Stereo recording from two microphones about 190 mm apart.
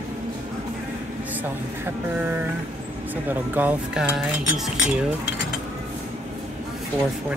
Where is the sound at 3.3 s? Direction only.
10° right (ahead or behind).